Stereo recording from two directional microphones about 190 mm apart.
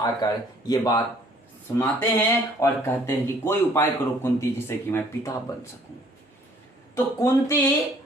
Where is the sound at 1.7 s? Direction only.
10° left (ahead or behind).